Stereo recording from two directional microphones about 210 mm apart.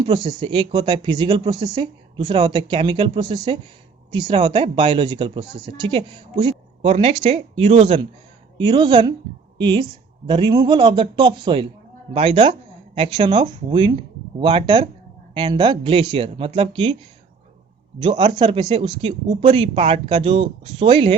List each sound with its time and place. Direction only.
0.1 s a woman's voice: 20° right (ahead or behind)
18.0 s speech: 25° right (ahead or behind)